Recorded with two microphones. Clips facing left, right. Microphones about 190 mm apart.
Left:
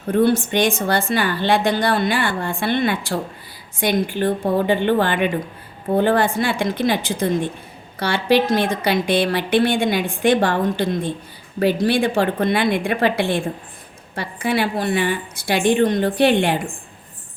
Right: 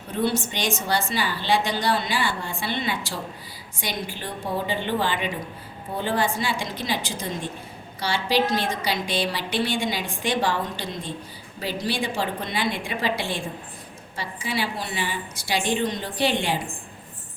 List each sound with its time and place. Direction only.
0.1 s a woman's voice: 55° left (ahead or behind)